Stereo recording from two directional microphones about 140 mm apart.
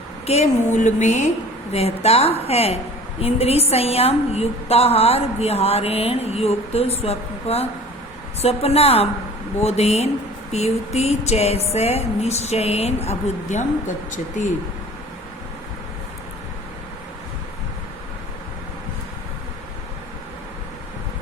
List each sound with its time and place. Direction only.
0.3 s a woman's voice: 50° left (ahead or behind)
1.7 s a woman's voice: 45° left (ahead or behind); by 14.5 s 65° left (ahead or behind)